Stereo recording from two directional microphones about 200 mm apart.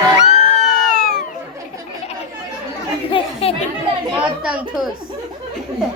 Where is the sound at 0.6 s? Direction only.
Centre (ahead or behind).